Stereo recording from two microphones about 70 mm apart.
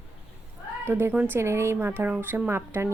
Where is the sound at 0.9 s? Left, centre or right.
Right.